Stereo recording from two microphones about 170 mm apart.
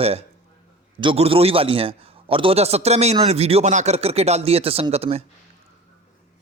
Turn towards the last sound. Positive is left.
turn(degrees=-35)  # may be behind; listen again after turning